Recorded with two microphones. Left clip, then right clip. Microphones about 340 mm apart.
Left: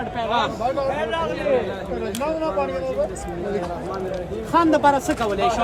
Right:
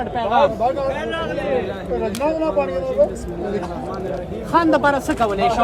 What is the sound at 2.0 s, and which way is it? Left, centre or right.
Speech, right.